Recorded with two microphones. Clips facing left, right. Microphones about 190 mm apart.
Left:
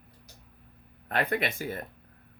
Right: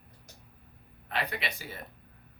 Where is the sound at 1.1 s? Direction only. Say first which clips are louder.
Left 6 dB; 50° left (ahead or behind).